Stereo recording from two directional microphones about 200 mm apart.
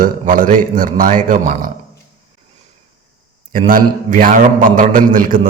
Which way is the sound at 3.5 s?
45° right (ahead or behind).